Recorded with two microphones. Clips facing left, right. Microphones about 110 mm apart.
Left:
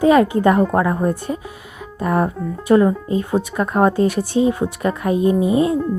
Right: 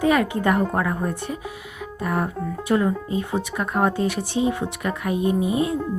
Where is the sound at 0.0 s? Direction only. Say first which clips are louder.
Left 7 dB; 30° left (ahead or behind).